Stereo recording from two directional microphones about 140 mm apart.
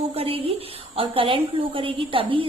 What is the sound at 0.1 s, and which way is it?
A woman's voice, 45° right (ahead or behind).